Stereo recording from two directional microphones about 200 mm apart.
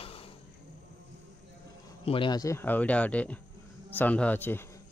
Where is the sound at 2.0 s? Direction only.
25° left (ahead or behind); by 4.6 s 10° left (ahead or behind).